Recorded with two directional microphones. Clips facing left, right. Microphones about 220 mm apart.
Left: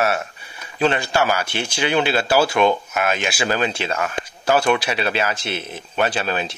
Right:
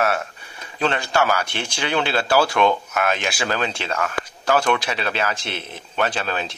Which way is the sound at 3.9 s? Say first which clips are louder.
Left 1 dB; 20° left (ahead or behind).